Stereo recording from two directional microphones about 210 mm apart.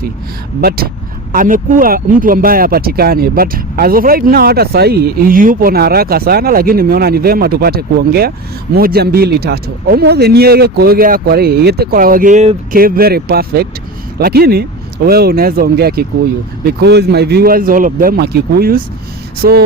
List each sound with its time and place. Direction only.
1.3 s speech: 40° right (ahead or behind)